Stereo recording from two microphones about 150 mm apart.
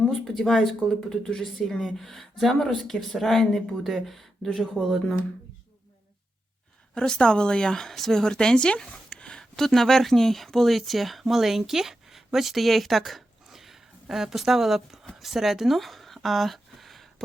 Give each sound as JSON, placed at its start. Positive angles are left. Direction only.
{"t": 0.1, "sound": "speech", "side_deg": 0}
{"t": 6.9, "sound": "a woman's voice", "side_deg": 5}